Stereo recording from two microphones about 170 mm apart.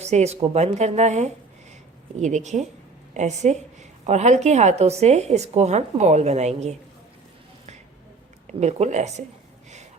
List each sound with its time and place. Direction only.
0.0 s a woman's voice: 40° right (ahead or behind)
8.6 s a woman's voice: 40° right (ahead or behind)